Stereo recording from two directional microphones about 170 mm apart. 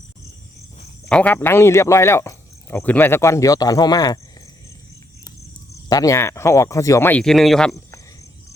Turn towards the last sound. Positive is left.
turn(degrees=5)  # may be behind; listen again after turning